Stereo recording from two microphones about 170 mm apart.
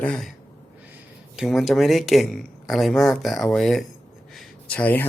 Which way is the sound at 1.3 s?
Centre (ahead or behind).